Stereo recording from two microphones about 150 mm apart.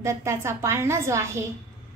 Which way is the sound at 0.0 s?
20° right (ahead or behind).